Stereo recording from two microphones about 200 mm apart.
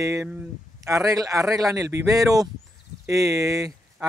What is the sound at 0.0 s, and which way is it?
Speech, 15° right (ahead or behind).